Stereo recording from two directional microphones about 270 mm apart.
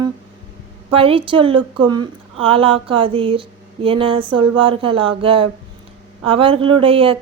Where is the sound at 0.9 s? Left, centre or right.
Centre.